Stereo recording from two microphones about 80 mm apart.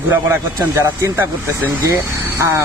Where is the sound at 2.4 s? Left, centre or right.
Right.